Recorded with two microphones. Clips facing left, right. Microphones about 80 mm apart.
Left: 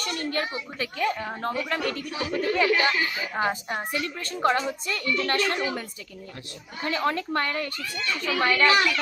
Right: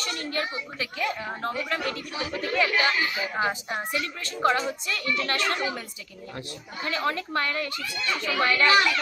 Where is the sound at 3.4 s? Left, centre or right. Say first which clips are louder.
Left 2 dB; left.